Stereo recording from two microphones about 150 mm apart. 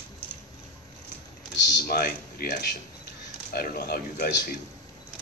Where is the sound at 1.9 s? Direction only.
90° left.